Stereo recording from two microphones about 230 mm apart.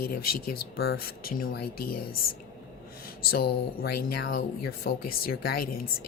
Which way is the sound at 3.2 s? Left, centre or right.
Left.